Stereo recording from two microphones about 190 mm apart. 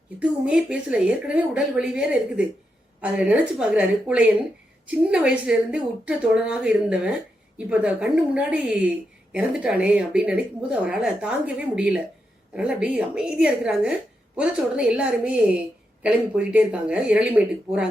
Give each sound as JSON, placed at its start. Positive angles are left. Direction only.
{"t": 0.2, "sound": "a woman's voice", "side_deg": -5}